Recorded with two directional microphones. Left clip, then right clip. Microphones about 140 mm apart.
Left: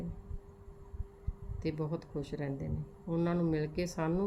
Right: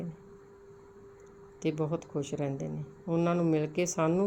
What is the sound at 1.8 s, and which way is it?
Speech, 30° right (ahead or behind).